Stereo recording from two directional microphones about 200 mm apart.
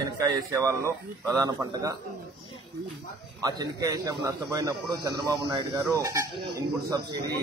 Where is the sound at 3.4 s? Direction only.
20° right (ahead or behind).